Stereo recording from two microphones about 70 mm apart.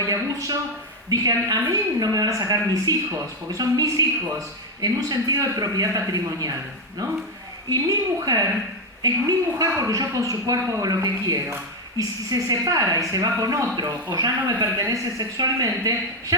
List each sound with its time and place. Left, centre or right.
0.0 s a sound: right
1.1 s speech: right
9.8 s speech: right
13.7 s speech: right